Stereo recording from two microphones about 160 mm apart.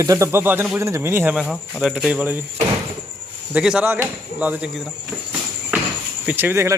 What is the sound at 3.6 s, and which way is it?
Speech, 5° right (ahead or behind).